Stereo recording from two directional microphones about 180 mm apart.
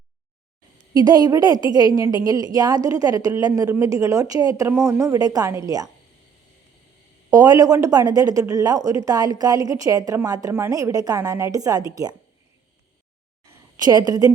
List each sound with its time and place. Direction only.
0.9 s speech: 20° right (ahead or behind)
7.3 s speech: 20° right (ahead or behind)
13.7 s speech: 20° right (ahead or behind)